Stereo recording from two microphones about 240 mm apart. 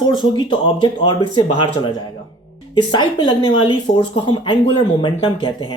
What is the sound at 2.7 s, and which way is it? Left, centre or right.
Speech, centre.